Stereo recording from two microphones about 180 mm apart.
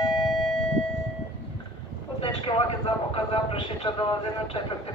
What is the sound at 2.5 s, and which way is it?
Vehicle, 30° left (ahead or behind).